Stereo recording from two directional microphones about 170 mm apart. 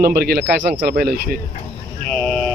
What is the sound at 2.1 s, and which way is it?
Vehicle, 5° left (ahead or behind).